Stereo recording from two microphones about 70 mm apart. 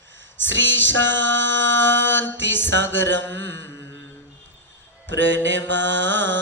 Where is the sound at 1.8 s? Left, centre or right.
Left.